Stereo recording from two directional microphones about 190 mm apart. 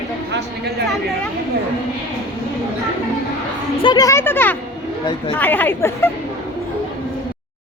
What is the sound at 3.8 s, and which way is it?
Speech, 20° left (ahead or behind).